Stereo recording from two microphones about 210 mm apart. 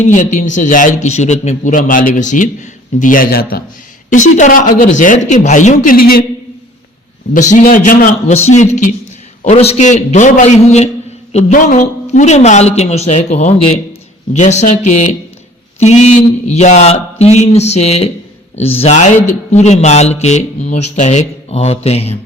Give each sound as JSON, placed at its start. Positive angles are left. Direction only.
{"t": 0.0, "sound": "a man's voice", "side_deg": 35}
{"t": 7.5, "sound": "a man's voice", "side_deg": 40}